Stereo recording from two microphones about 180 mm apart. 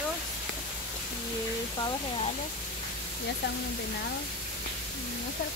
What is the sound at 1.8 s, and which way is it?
Speech, 25° left (ahead or behind).